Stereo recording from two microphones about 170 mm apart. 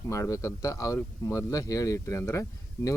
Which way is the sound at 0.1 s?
20° left (ahead or behind).